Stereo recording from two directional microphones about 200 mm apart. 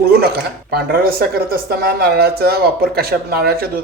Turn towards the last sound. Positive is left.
turn(degrees=-50)  # may be behind; listen again after turning